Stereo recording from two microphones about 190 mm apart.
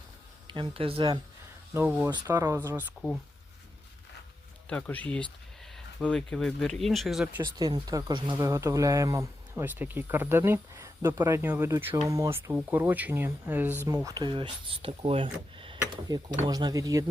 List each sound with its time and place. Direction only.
0.4 s speech: 25° right (ahead or behind)
1.7 s speech: 10° right (ahead or behind)
4.7 s speech: 10° left (ahead or behind)
7.4 s speech: 20° right (ahead or behind)